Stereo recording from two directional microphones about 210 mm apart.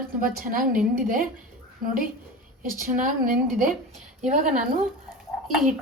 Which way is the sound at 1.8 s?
40° right (ahead or behind).